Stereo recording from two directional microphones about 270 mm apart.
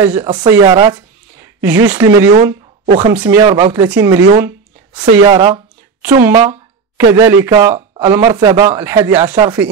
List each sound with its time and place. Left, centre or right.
0.0 s speech: centre
6.3 s speech: centre